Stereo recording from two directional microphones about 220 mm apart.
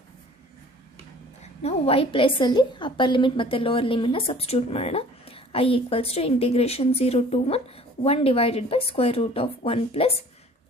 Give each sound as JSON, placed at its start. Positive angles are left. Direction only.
{"t": 1.4, "sound": "a woman's voice", "side_deg": 30}